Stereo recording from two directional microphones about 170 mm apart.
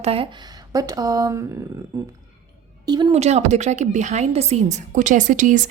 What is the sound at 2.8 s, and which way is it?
Speech, 25° right (ahead or behind).